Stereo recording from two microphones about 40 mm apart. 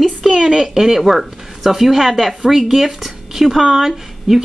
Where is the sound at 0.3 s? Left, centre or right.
Centre.